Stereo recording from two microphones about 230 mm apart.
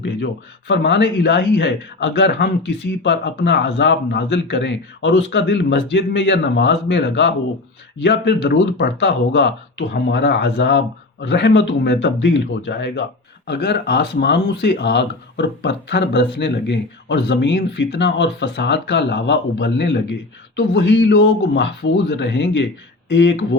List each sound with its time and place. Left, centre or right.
0.7 s a man's voice: left